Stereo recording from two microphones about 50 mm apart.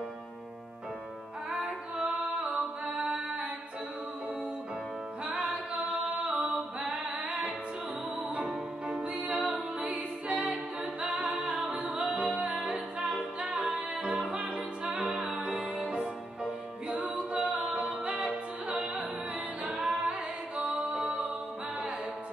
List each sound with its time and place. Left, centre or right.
1.6 s music: right
3.0 s music: centre
5.2 s music: right
6.2 s a capella: right
6.8 s a sound: centre
8.4 s music: centre
15.1 s music: centre
15.4 s music: right
17.1 s music: right